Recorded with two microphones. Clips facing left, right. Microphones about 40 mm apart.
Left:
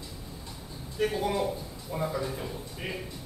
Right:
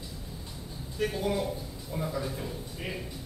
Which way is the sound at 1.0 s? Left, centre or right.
Centre.